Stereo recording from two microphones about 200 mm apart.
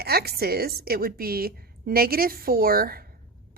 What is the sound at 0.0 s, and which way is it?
A woman's voice, 50° right (ahead or behind).